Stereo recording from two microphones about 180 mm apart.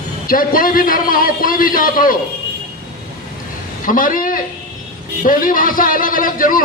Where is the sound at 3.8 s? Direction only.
50° left (ahead or behind).